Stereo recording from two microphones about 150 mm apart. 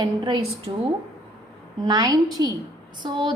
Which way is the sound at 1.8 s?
25° right (ahead or behind).